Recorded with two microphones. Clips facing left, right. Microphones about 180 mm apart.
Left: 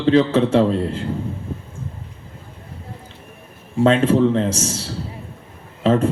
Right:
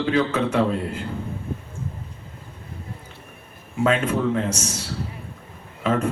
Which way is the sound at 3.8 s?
30° left (ahead or behind).